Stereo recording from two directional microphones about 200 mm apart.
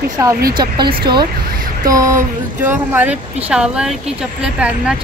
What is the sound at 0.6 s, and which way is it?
Speech, 20° right (ahead or behind).